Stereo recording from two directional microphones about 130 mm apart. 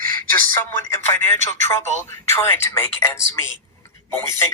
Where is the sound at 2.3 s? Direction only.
20° left (ahead or behind).